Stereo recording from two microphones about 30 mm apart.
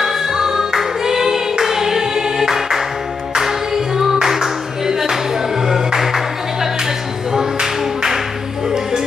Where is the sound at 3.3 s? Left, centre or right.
Centre.